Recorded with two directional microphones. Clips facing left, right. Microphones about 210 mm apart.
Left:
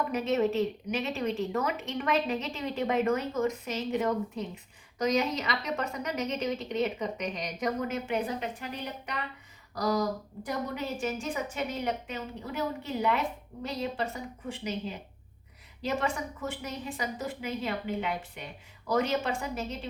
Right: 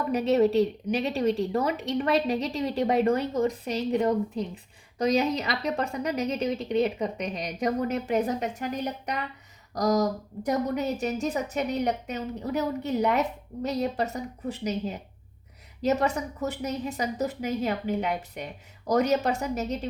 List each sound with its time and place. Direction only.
0.1 s a woman's voice: 35° right (ahead or behind)